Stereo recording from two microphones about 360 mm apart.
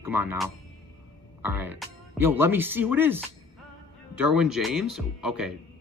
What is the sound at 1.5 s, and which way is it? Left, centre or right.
Speech, centre.